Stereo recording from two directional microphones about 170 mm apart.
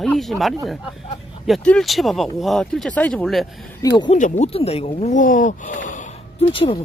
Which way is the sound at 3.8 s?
25° left (ahead or behind).